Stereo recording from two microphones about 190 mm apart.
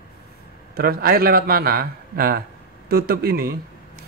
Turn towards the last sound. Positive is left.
turn(degrees=-55)  # may be behind; listen again after turning